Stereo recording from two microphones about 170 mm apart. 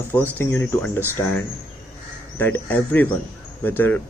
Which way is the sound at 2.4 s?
10° left (ahead or behind).